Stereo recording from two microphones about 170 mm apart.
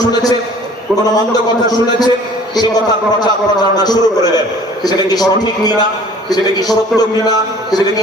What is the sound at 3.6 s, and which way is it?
A man's voice, 25° left (ahead or behind).